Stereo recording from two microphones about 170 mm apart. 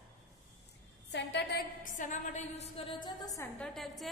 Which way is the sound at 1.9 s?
50° left (ahead or behind).